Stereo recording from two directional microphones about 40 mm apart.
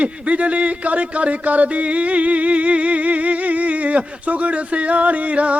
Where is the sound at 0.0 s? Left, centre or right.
Right.